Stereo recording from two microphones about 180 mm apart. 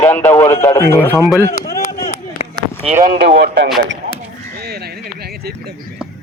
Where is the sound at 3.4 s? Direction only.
70° right (ahead or behind).